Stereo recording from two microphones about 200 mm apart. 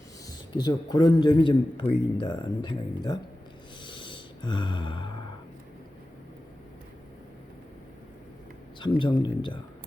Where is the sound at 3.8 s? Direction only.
25° left (ahead or behind).